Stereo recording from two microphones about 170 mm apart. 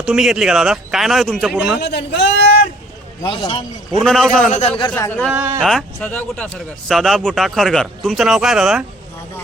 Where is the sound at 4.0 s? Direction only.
Centre (ahead or behind).